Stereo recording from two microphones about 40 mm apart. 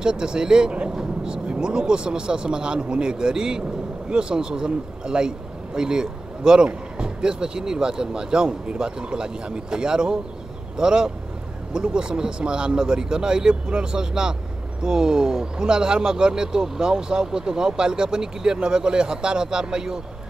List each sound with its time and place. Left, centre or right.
0.0 s a man's voice: right